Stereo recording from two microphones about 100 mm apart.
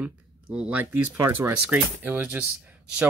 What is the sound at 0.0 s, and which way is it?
Speech, 15° right (ahead or behind).